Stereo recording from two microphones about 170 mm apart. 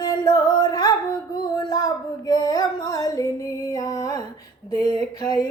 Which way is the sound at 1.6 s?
25° left (ahead or behind).